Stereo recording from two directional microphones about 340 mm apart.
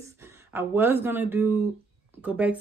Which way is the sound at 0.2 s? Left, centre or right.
Centre.